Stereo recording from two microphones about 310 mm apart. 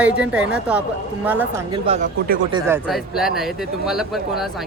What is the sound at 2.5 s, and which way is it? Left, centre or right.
Speech, centre.